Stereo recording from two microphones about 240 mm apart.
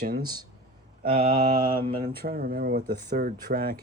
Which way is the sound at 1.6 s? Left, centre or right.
Centre.